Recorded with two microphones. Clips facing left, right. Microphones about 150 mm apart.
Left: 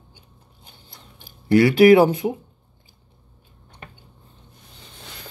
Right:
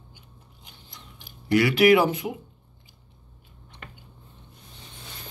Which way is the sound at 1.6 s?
30° left (ahead or behind).